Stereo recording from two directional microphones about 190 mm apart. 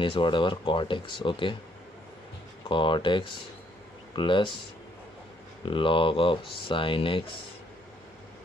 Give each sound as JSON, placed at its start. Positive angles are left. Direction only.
{"t": 0.0, "sound": "speech", "side_deg": 25}
{"t": 2.7, "sound": "speech", "side_deg": 25}
{"t": 5.7, "sound": "speech", "side_deg": 25}